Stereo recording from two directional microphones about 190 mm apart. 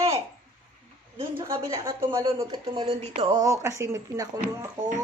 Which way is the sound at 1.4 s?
15° right (ahead or behind).